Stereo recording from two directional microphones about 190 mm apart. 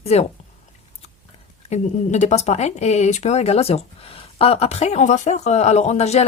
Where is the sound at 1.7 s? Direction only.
35° left (ahead or behind).